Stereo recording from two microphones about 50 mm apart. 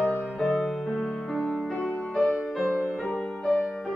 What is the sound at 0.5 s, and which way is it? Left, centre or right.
Music, centre.